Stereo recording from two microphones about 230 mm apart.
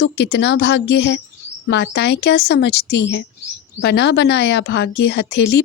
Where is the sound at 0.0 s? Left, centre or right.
Left.